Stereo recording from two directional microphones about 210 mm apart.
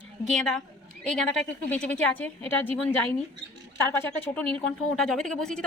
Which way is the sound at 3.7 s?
10° left (ahead or behind).